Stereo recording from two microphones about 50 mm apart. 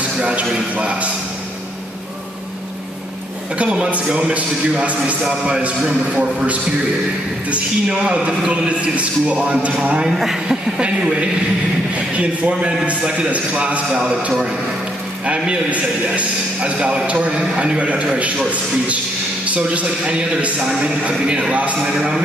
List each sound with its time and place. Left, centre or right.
0.2 s a man's voice: right
3.5 s a man's voice: right
5.6 s a man's voice: right
10.1 s speech: centre
10.8 s a man's voice: centre
15.2 s a man's voice: right
21.8 s speech: centre